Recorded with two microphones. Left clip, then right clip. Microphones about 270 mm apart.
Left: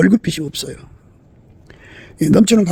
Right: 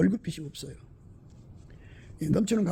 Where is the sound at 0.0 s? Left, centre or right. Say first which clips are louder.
Left 14 dB; left.